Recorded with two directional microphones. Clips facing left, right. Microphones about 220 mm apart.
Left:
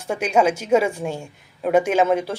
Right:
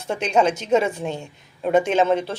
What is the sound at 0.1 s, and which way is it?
A woman's voice, 10° left (ahead or behind).